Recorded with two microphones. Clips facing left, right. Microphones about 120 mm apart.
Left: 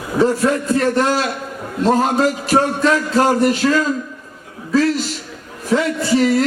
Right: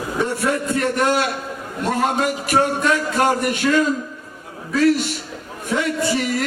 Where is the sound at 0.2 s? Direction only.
30° left (ahead or behind).